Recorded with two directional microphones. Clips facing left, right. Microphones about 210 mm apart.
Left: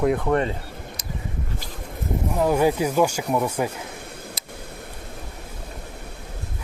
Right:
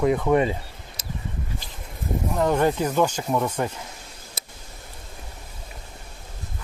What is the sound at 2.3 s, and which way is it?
Speech, 5° left (ahead or behind).